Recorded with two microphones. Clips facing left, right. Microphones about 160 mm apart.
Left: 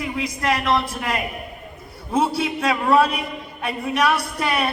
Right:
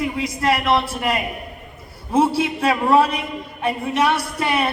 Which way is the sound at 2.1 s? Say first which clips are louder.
Right 3 dB; 30° right (ahead or behind).